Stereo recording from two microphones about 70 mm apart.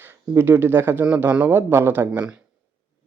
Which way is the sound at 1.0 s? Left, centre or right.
Centre.